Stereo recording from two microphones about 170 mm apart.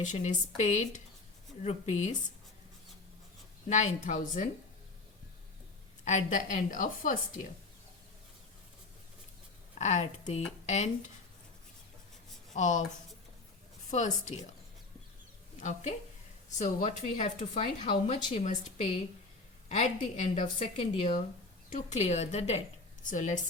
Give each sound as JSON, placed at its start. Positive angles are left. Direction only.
{"t": 0.0, "sound": "a woman's voice", "side_deg": 45}
{"t": 3.7, "sound": "a woman's voice", "side_deg": 45}
{"t": 6.1, "sound": "a woman's voice", "side_deg": 45}
{"t": 9.7, "sound": "speech", "side_deg": 40}
{"t": 12.5, "sound": "speech", "side_deg": 45}
{"t": 13.9, "sound": "a woman's voice", "side_deg": 45}
{"t": 15.6, "sound": "a woman's voice", "side_deg": 45}
{"t": 21.7, "sound": "a woman's voice", "side_deg": 45}